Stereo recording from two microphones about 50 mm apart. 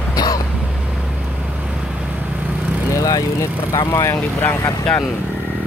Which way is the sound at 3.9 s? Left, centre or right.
Left.